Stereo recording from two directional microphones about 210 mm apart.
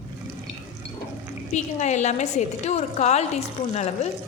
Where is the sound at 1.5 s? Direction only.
35° left (ahead or behind).